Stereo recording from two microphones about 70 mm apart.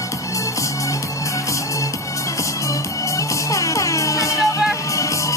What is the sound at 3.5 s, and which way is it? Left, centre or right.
Music, left.